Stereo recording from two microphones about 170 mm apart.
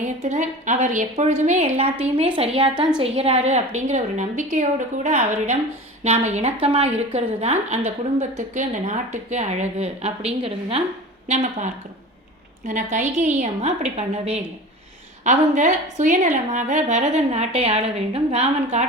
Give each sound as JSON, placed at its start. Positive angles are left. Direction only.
{"t": 0.0, "sound": "a woman's voice", "side_deg": -45}